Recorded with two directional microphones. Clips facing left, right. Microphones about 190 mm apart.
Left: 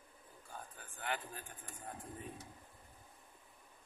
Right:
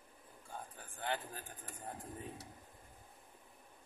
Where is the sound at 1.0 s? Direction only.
30° right (ahead or behind).